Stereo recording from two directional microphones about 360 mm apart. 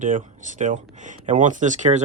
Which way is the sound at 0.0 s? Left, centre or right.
Right.